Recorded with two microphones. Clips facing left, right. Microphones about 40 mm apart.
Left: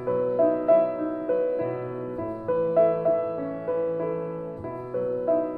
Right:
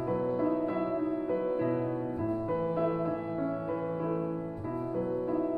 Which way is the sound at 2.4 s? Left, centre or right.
Centre.